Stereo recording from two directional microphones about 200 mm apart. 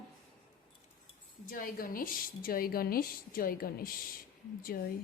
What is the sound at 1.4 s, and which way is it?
A woman's voice, 45° left (ahead or behind).